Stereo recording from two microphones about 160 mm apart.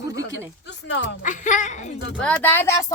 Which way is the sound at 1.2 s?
50° left (ahead or behind).